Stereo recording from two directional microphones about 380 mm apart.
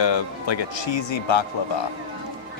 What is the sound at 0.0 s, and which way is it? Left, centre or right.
Speech, left.